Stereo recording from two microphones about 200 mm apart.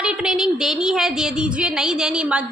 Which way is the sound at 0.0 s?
5° right (ahead or behind).